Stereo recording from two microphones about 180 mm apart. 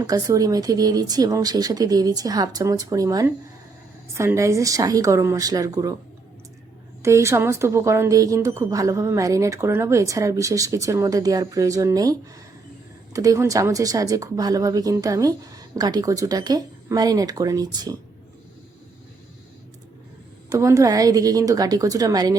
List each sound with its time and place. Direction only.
0.0 s a woman's voice: 20° right (ahead or behind)
7.0 s a woman's voice: 15° right (ahead or behind)
13.1 s a woman's voice: 20° right (ahead or behind)
20.5 s a woman's voice: 15° right (ahead or behind)